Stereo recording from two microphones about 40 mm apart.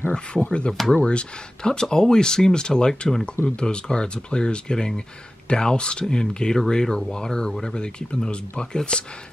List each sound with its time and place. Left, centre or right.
0.1 s speech: left